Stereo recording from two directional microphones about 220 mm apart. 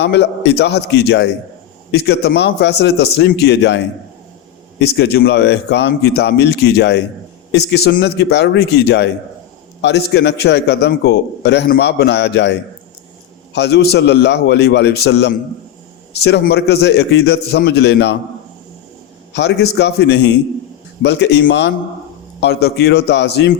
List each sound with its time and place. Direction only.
0.0 s a man's voice: 50° left (ahead or behind)
4.8 s a man's voice: 45° left (ahead or behind)
19.3 s a man's voice: 50° left (ahead or behind)